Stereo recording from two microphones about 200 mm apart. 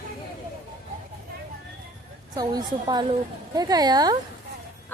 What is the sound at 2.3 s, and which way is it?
A woman's voice, 20° right (ahead or behind).